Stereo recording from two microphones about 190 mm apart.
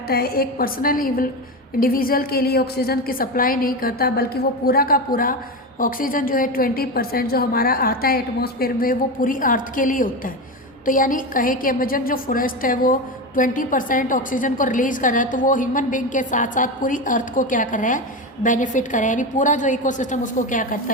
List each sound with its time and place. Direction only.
0.1 s a woman's voice: 55° left (ahead or behind)